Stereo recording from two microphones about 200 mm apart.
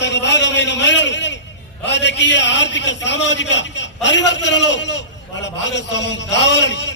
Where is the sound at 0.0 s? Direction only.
60° left (ahead or behind).